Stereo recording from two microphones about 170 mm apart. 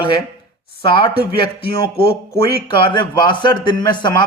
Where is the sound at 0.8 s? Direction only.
30° left (ahead or behind).